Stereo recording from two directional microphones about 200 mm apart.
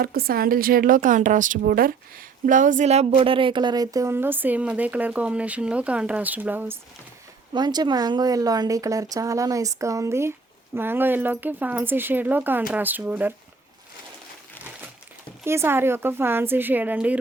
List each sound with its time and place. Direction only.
0.0 s a woman's voice: 50° right (ahead or behind); by 6.7 s 10° right (ahead or behind)
7.5 s speech: 20° right (ahead or behind)
15.4 s speech: 10° right (ahead or behind)